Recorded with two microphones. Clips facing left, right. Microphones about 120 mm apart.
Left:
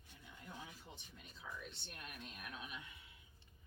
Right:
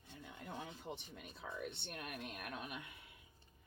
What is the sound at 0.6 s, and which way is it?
Speech, 60° right (ahead or behind).